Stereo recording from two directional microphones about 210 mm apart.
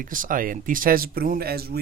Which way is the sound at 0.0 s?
40° right (ahead or behind).